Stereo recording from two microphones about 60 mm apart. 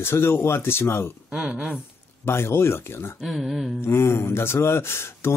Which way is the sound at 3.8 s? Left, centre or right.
Left.